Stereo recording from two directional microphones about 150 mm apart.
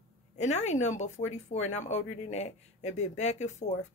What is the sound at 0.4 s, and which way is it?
Speech, 50° left (ahead or behind).